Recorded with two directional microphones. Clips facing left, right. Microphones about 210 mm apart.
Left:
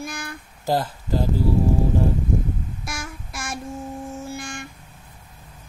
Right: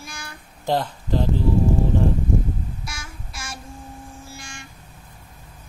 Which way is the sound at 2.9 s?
55° left (ahead or behind).